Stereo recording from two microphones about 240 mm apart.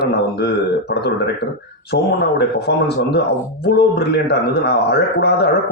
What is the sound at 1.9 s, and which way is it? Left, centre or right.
A man's voice, left.